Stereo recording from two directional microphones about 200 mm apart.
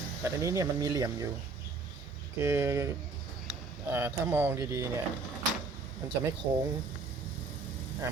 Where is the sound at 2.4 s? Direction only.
10° right (ahead or behind).